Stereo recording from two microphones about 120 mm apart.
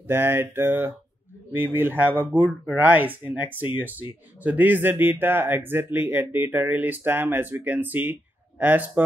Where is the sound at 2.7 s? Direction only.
15° right (ahead or behind).